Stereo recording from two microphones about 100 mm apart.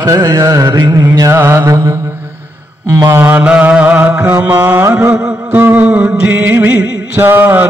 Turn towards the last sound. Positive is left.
turn(degrees=-20)  # may be behind; listen again after turning